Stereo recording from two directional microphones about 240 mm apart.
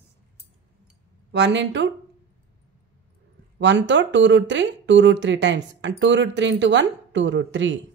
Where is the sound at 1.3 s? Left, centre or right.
Right.